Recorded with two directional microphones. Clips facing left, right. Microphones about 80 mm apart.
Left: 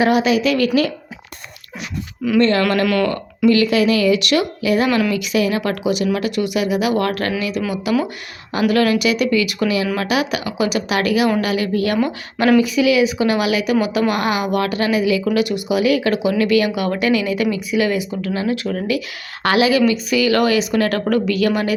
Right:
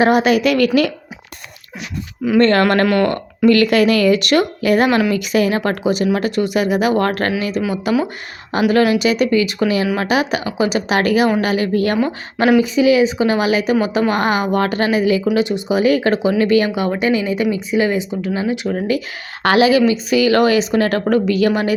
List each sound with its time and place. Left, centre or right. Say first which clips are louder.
0.0 s speech: right 2 dB; right
2.4 s speech: right 3 dB; right
2.8 s speech: right 2 dB; right
4.9 s speech: right 2 dB; right
8.6 s speech: right 2 dB; right